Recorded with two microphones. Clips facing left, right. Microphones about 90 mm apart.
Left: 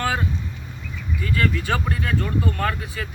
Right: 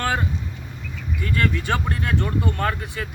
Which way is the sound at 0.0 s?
5° left (ahead or behind).